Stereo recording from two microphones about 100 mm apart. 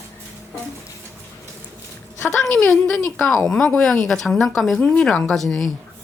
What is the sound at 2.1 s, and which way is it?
Speech, 25° left (ahead or behind).